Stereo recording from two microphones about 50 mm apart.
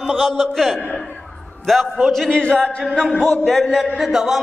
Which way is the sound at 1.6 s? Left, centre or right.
Centre.